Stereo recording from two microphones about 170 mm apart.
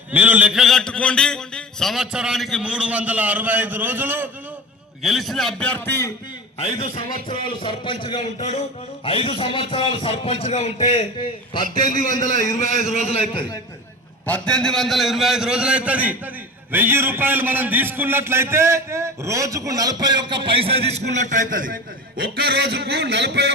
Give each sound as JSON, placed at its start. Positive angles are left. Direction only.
{"t": 0.1, "sound": "a man's voice", "side_deg": -10}
{"t": 5.0, "sound": "a man's voice", "side_deg": 0}
{"t": 6.6, "sound": "a man's voice", "side_deg": 35}
{"t": 11.8, "sound": "a man's voice", "side_deg": 20}
{"t": 12.5, "sound": "a man's voice", "side_deg": 45}
{"t": 14.3, "sound": "a man's voice", "side_deg": 5}
{"t": 22.2, "sound": "a man's voice", "side_deg": -65}